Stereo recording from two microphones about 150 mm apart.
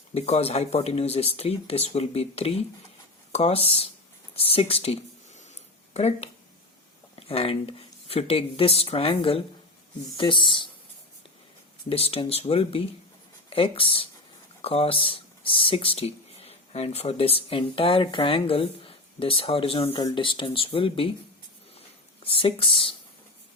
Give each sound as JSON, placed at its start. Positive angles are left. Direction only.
{"t": 0.1, "sound": "speech", "side_deg": 45}
{"t": 11.9, "sound": "speech", "side_deg": 40}
{"t": 21.8, "sound": "a sound", "side_deg": 40}